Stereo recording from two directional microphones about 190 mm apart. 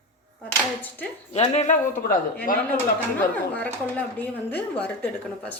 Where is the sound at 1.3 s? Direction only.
35° left (ahead or behind).